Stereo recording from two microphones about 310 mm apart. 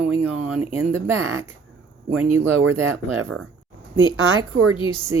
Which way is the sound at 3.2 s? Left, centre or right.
Right.